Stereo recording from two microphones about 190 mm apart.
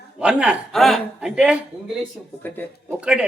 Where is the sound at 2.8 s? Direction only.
5° right (ahead or behind).